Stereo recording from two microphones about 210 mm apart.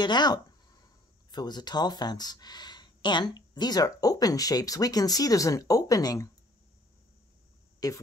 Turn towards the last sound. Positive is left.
turn(degrees=15)  # may be behind; listen again after turning